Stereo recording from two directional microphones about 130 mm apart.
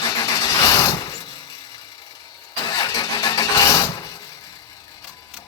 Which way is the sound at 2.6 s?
30° left (ahead or behind).